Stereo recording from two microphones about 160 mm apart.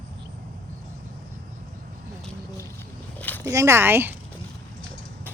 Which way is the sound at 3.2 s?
10° left (ahead or behind).